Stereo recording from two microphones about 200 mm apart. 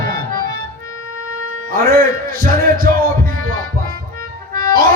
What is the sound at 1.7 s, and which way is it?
Music, 45° right (ahead or behind).